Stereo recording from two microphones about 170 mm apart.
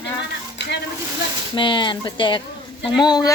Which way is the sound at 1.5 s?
30° left (ahead or behind).